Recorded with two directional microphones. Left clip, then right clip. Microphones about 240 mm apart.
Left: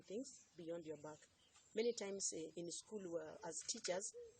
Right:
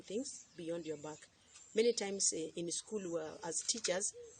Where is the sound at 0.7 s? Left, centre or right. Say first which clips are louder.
Right 7 dB; centre.